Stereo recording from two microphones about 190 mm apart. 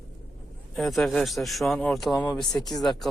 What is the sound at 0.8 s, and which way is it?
A man's voice, centre (ahead or behind).